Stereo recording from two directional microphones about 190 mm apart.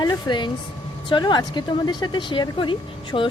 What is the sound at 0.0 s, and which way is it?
A woman's voice, 20° left (ahead or behind).